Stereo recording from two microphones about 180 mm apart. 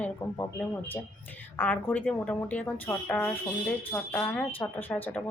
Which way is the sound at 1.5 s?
10° left (ahead or behind).